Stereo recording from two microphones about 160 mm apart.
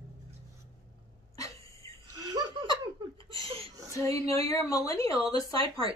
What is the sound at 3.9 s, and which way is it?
A woman's voice, 20° left (ahead or behind).